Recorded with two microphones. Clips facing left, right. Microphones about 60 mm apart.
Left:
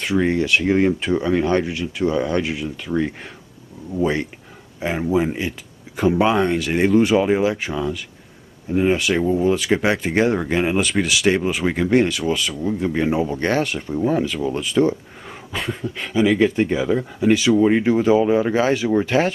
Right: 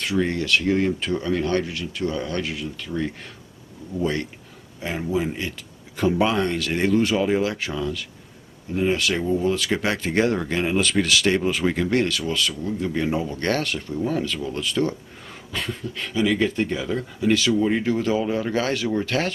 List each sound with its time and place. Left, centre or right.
0.0 s speech: centre
4.0 s speech: centre